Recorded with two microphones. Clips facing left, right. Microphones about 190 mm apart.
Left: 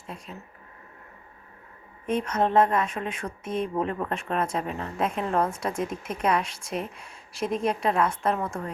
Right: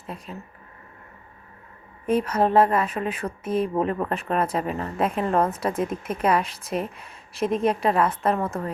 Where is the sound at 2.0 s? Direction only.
5° right (ahead or behind).